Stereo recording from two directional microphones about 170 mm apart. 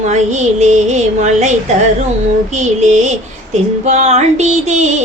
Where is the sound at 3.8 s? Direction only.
40° right (ahead or behind).